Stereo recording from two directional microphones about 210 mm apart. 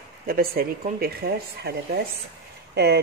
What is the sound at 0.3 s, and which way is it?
Speech, 45° right (ahead or behind).